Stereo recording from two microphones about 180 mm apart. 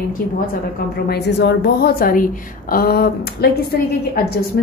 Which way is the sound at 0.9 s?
65° left (ahead or behind).